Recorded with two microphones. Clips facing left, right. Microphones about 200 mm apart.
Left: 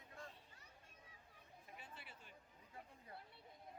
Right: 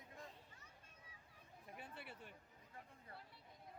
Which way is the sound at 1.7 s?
60° right (ahead or behind).